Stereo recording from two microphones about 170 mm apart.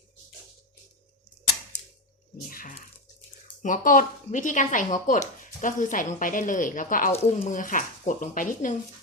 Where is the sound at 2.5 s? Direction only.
55° left (ahead or behind).